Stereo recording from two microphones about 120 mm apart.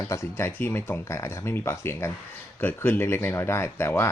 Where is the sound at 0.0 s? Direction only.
25° left (ahead or behind).